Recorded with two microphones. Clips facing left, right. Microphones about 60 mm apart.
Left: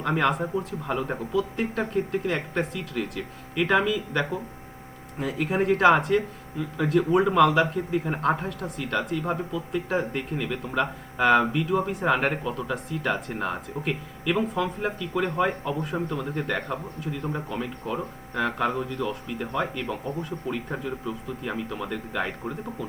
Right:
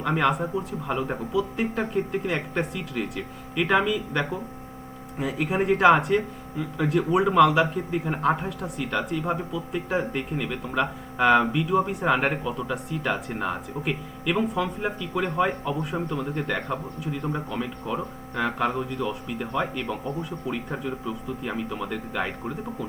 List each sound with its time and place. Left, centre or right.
0.0 s a man's voice: centre